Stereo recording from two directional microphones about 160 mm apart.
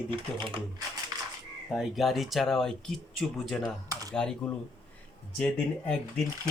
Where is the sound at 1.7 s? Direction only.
Centre (ahead or behind).